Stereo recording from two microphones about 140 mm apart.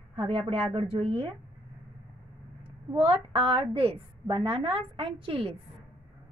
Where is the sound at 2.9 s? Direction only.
40° right (ahead or behind).